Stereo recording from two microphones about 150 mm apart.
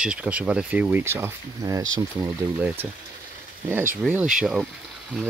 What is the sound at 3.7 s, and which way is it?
Speech, 15° right (ahead or behind).